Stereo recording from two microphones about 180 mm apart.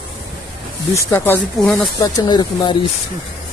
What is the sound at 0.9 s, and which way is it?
Speech, 10° left (ahead or behind).